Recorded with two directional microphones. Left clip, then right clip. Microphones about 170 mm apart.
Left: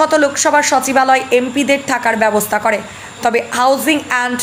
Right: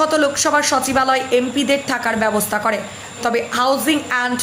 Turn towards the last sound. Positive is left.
turn(degrees=10)  # may be behind; listen again after turning